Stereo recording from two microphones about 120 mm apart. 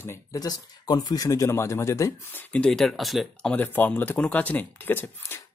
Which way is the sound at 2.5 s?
5° left (ahead or behind).